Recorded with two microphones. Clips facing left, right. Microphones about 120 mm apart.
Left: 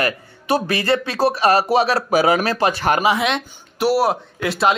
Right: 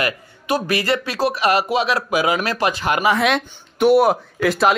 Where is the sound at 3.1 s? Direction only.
Centre (ahead or behind).